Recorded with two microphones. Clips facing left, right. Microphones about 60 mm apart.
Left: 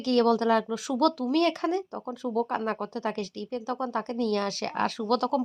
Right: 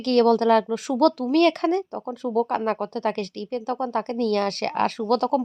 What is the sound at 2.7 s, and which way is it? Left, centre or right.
Speech, right.